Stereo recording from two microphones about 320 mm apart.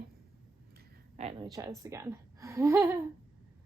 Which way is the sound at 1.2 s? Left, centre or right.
Centre.